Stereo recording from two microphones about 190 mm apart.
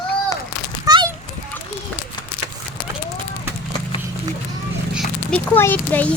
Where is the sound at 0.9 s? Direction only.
20° right (ahead or behind).